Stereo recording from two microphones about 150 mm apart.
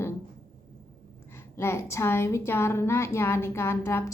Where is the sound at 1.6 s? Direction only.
15° left (ahead or behind).